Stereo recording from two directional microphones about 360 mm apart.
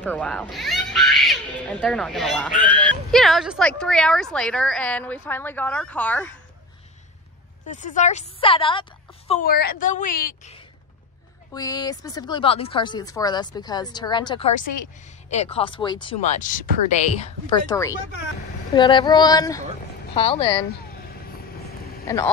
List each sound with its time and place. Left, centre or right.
0.0 s speech: centre
7.7 s a woman's voice: left
9.3 s a woman's voice: left
11.5 s a woman's voice: centre
22.0 s speech: centre